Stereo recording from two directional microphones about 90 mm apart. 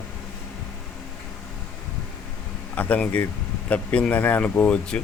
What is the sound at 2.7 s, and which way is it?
Speech, 15° left (ahead or behind).